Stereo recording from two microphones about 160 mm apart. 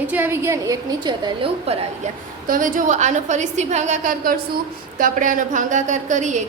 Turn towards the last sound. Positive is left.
turn(degrees=-50)  # may be behind; listen again after turning